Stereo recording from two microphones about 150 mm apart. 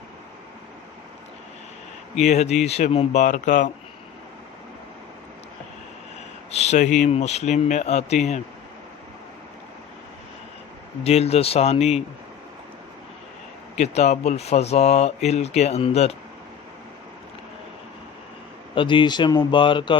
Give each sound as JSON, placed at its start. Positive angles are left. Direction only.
{"t": 2.1, "sound": "speech", "side_deg": 50}
{"t": 3.2, "sound": "speech", "side_deg": 55}
{"t": 6.5, "sound": "a sound", "side_deg": 45}
{"t": 7.0, "sound": "speech", "side_deg": 50}
{"t": 11.0, "sound": "speech", "side_deg": 45}
{"t": 13.7, "sound": "speech", "side_deg": 50}
{"t": 18.7, "sound": "speech", "side_deg": 35}